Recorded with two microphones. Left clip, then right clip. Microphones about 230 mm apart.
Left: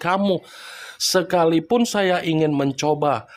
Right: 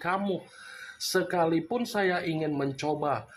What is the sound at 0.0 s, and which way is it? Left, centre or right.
Speech, left.